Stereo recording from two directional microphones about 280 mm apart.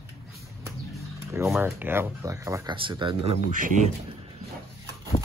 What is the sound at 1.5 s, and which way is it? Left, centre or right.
Speech, centre.